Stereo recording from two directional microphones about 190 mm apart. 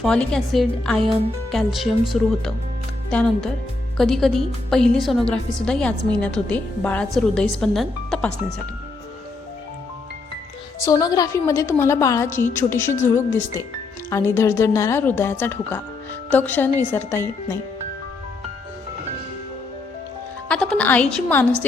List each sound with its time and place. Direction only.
0.0 s speech: 5° left (ahead or behind)
3.1 s speech: 5° left (ahead or behind)
10.8 s a woman's voice: 20° left (ahead or behind)
20.5 s a woman's voice: 5° left (ahead or behind)